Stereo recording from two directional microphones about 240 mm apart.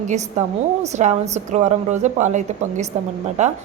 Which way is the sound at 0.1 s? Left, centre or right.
Right.